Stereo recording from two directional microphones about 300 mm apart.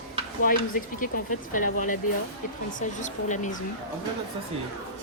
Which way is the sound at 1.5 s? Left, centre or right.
Left.